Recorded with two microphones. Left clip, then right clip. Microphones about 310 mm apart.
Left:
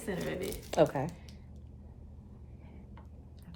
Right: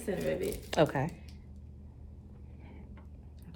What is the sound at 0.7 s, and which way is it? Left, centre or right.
Speech, right.